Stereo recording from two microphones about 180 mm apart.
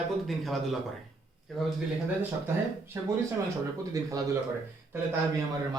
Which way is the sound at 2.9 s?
20° right (ahead or behind).